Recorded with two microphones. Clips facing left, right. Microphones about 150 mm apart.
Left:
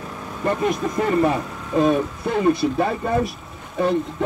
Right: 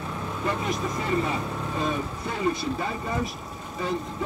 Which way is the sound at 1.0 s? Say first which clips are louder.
Left 10 dB; 55° left (ahead or behind).